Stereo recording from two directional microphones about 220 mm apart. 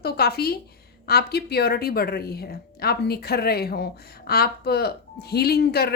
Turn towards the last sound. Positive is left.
turn(degrees=45)  # may be behind; listen again after turning